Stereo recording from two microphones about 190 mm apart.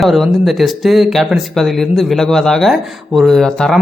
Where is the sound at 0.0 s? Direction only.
Centre (ahead or behind).